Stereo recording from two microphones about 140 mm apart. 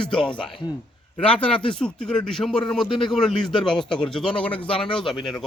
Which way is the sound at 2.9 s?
35° left (ahead or behind).